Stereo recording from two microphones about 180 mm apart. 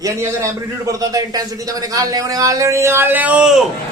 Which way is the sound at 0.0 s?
15° right (ahead or behind).